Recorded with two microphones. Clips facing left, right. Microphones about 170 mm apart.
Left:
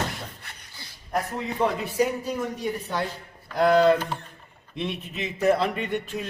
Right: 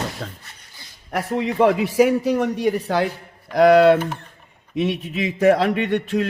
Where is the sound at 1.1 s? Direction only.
85° right.